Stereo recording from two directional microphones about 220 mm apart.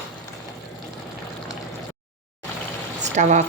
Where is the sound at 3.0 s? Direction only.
35° right (ahead or behind).